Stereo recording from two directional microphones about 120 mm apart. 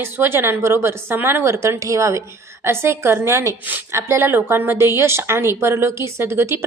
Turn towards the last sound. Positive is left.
turn(degrees=-20)  # may be behind; listen again after turning